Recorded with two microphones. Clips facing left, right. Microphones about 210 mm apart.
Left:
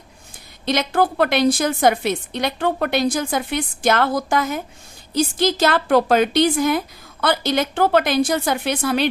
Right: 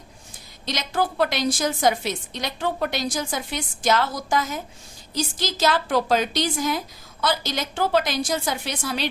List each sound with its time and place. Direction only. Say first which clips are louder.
0.6 s a woman's voice: left 6 dB; 60° left (ahead or behind)